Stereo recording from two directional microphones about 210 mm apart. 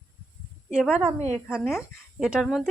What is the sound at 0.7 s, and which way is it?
Speech, 5° right (ahead or behind).